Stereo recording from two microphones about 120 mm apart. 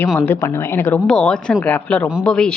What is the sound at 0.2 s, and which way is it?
Speech, 20° left (ahead or behind).